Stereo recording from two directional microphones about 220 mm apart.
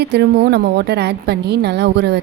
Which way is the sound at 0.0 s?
50° right (ahead or behind).